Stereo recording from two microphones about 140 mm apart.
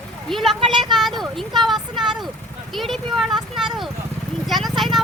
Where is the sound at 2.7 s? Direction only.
Centre (ahead or behind).